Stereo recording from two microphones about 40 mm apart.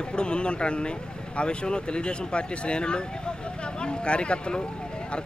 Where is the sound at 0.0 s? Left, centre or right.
Left.